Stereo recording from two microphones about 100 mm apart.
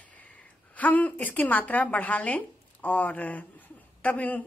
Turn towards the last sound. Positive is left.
turn(degrees=15)  # may be behind; listen again after turning